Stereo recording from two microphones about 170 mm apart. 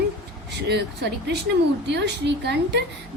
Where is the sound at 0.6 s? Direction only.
80° right.